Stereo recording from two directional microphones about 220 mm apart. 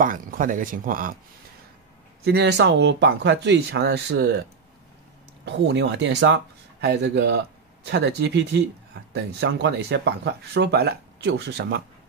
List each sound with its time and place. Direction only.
0.0 s speech: 40° right (ahead or behind)
2.2 s speech: 45° right (ahead or behind)
5.4 s speech: 55° right (ahead or behind)